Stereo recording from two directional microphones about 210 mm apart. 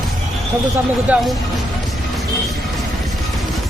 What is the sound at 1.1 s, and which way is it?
Speech, 5° right (ahead or behind).